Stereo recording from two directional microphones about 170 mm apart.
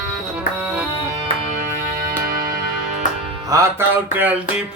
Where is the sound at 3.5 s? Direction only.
20° right (ahead or behind).